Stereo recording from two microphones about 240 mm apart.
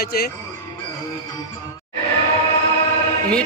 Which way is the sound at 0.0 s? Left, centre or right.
Left.